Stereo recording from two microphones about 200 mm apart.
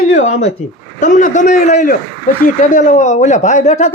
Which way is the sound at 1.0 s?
40° left (ahead or behind).